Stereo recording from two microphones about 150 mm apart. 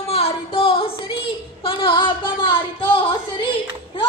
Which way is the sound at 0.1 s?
40° left (ahead or behind).